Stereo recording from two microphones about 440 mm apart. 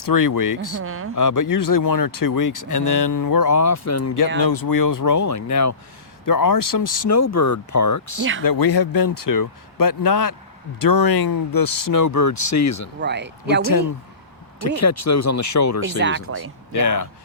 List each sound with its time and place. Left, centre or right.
0.0 s speech: left
0.8 s speech: right
1.1 s speech: left
4.4 s speech: left
8.4 s speech: left
13.0 s speech: right
14.8 s speech: left
16.0 s speech: right
16.7 s speech: left